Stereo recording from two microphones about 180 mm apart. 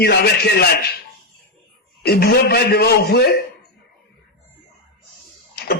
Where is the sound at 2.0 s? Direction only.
60° left (ahead or behind).